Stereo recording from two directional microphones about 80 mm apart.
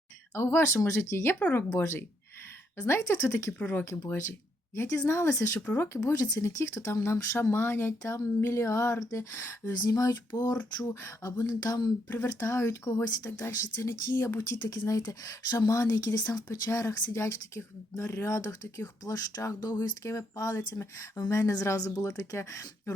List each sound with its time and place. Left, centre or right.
0.3 s speech: left
1.4 s speech: centre
1.8 s speech: left
3.6 s speech: left
3.8 s a woman's voice: left
9.7 s speech: left
12.0 s speech: left
14.1 s speech: left
14.7 s speech: left